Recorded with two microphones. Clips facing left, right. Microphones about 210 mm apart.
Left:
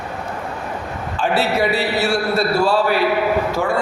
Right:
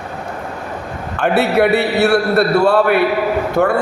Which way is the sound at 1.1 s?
60° right (ahead or behind).